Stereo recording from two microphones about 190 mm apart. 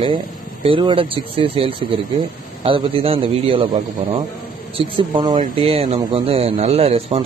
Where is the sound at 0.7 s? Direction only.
25° right (ahead or behind).